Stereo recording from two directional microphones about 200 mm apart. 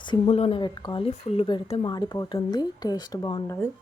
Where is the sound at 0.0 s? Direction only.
25° left (ahead or behind).